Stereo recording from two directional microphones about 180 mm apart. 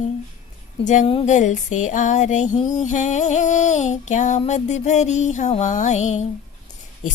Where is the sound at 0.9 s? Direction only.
40° left (ahead or behind).